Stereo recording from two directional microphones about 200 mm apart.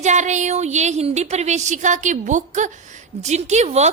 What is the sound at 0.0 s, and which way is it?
A woman's voice, 35° right (ahead or behind).